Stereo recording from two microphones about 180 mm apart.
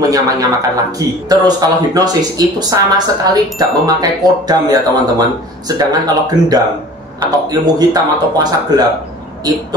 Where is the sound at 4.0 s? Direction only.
20° right (ahead or behind).